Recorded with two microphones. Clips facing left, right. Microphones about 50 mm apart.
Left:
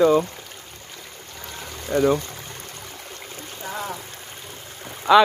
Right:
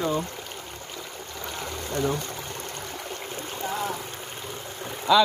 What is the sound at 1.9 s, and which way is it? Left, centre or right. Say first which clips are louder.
Speech: left 8 dB; left.